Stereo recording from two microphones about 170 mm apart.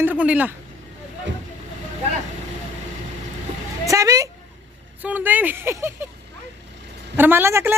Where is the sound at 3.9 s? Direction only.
20° right (ahead or behind).